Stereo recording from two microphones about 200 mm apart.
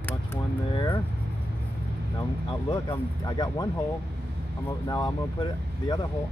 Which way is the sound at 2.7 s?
20° left (ahead or behind).